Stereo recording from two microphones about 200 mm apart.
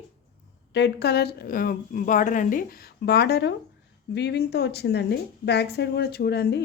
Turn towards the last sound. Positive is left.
turn(degrees=55)  # may be behind; listen again after turning